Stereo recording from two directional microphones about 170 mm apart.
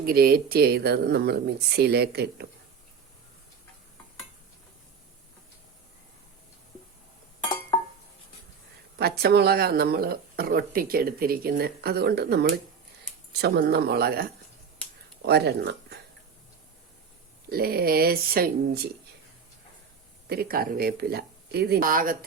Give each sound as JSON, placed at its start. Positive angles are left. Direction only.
{"t": 0.0, "sound": "speech", "side_deg": -60}
{"t": 9.0, "sound": "speech", "side_deg": -65}
{"t": 17.5, "sound": "speech", "side_deg": -65}
{"t": 20.2, "sound": "speech", "side_deg": -65}